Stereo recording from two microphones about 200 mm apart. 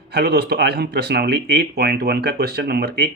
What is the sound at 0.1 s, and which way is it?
Speech, 50° right (ahead or behind).